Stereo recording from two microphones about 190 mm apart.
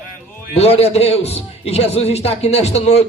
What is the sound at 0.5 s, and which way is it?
A man's voice, 35° left (ahead or behind).